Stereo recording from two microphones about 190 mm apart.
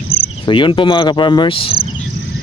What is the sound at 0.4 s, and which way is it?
Speech, 25° left (ahead or behind).